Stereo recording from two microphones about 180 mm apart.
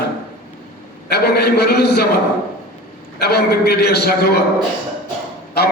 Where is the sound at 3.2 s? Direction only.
65° left (ahead or behind).